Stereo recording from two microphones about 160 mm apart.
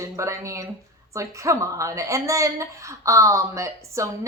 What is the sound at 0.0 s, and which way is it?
A woman's voice, 20° right (ahead or behind).